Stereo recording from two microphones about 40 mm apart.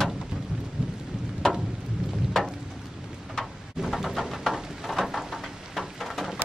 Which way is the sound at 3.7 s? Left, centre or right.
Centre.